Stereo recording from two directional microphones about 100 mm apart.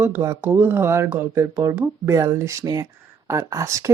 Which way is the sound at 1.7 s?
20° right (ahead or behind).